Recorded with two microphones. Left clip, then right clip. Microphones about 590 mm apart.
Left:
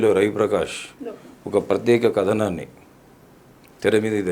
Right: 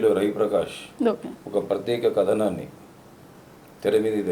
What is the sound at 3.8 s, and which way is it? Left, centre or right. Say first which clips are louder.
Speech: left 2 dB; left.